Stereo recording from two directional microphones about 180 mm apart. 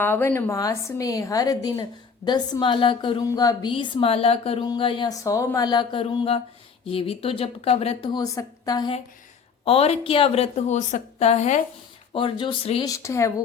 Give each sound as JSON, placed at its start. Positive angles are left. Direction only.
{"t": 0.0, "sound": "a woman's voice", "side_deg": 10}
{"t": 8.1, "sound": "a woman's voice", "side_deg": 20}
{"t": 9.6, "sound": "a woman's voice", "side_deg": 35}
{"t": 12.1, "sound": "a woman's voice", "side_deg": 30}
{"t": 12.9, "sound": "speech", "side_deg": 15}